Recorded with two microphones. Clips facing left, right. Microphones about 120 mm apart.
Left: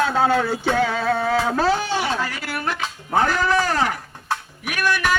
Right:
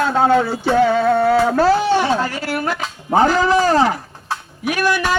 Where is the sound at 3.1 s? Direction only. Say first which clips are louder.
Right 5 dB; 20° right (ahead or behind).